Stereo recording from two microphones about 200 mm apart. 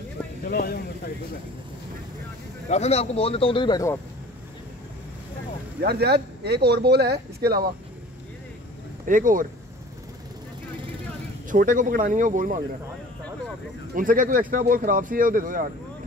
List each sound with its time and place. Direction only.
0.5 s speech: 50° left (ahead or behind)
2.7 s speech: 30° left (ahead or behind)
5.8 s speech: 55° right (ahead or behind)
9.0 s speech: 40° right (ahead or behind)
11.5 s speech: 40° right (ahead or behind)
13.9 s speech: 45° right (ahead or behind)